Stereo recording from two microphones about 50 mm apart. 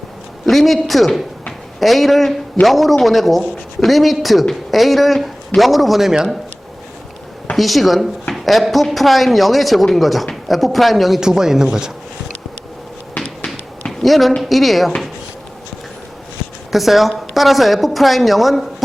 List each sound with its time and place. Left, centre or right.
0.4 s speech: centre
7.5 s speech: centre
13.1 s a sound: left
14.0 s speech: centre
16.7 s speech: centre